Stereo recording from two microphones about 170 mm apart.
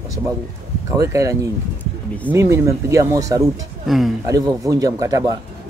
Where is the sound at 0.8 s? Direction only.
15° right (ahead or behind).